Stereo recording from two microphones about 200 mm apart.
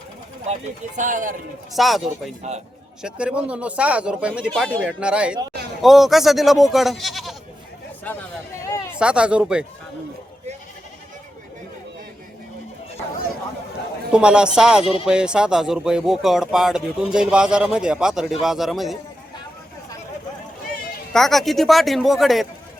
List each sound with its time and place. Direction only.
0.9 s speech: 40° right (ahead or behind)
1.7 s speech: centre (ahead or behind)
8.6 s a sound: 15° left (ahead or behind)
9.0 s speech: 5° right (ahead or behind)
14.1 s speech: 5° right (ahead or behind)
21.1 s speech: centre (ahead or behind)